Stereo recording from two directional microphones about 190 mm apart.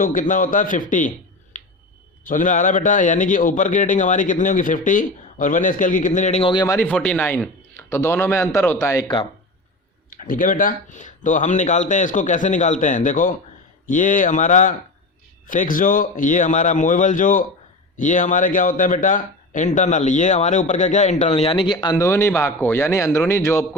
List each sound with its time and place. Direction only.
0.0 s a man's voice: 45° left (ahead or behind)
2.2 s a man's voice: 45° left (ahead or behind); by 6.7 s 25° left (ahead or behind)
6.7 s a man's voice: 10° left (ahead or behind)
10.2 s a man's voice: 45° left (ahead or behind); by 23.6 s 15° left (ahead or behind)